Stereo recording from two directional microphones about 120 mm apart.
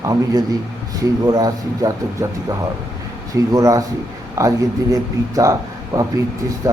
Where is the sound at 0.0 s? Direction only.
30° right (ahead or behind).